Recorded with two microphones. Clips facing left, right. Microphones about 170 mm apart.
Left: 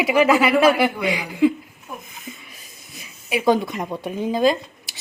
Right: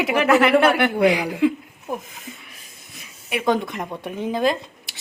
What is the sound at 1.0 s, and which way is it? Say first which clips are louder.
Cutlery: right 7 dB; 65° right (ahead or behind).